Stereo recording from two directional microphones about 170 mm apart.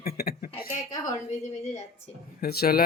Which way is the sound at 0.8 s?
25° left (ahead or behind).